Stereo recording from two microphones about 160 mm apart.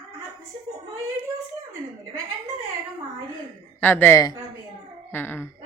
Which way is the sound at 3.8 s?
15° left (ahead or behind).